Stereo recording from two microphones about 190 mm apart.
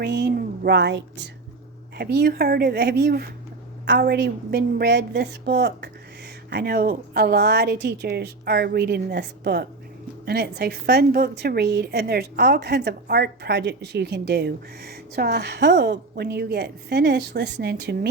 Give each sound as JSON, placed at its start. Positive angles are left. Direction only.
{"t": 0.0, "sound": "a woman's voice", "side_deg": -60}